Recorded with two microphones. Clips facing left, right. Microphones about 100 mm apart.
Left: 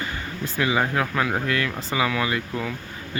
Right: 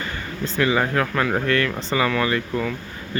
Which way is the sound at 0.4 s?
15° left (ahead or behind).